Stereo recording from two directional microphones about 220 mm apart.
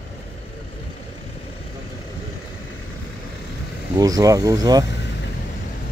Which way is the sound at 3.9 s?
15° right (ahead or behind).